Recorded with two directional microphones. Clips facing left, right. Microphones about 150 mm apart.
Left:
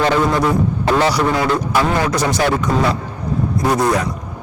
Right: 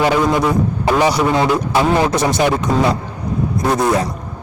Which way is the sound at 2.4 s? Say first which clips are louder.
Right 1 dB; 15° right (ahead or behind).